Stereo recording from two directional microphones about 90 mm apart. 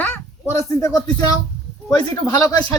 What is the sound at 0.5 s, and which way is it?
Speech, 35° left (ahead or behind).